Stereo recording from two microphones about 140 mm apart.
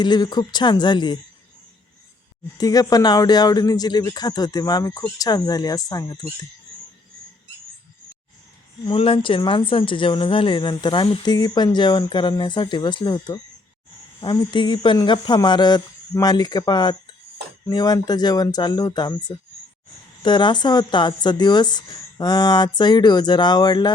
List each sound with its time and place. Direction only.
0.0 s speech: 30° left (ahead or behind)
2.6 s speech: 25° left (ahead or behind)
8.8 s speech: 40° left (ahead or behind)